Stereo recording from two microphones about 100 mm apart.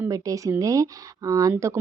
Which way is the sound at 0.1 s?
35° right (ahead or behind).